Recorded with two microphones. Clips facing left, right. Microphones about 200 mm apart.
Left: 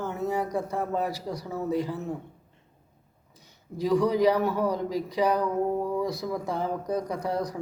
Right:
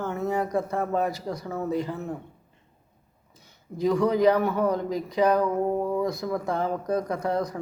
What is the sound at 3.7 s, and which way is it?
Speech, 15° left (ahead or behind).